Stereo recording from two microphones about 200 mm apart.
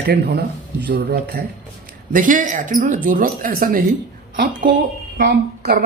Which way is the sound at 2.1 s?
40° right (ahead or behind).